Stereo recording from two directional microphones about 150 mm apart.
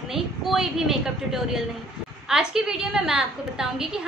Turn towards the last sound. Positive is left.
turn(degrees=-5)  # may be behind; listen again after turning